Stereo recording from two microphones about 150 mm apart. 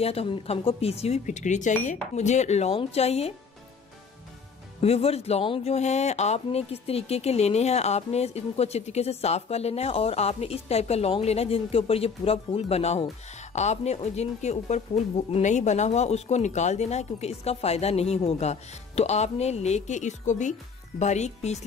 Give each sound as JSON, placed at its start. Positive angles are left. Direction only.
{"t": 0.0, "sound": "speech", "side_deg": 40}
{"t": 4.8, "sound": "speech", "side_deg": 45}